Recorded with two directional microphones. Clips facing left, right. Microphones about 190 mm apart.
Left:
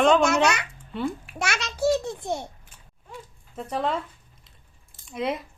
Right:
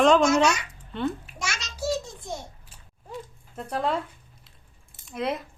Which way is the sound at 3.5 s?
Centre (ahead or behind).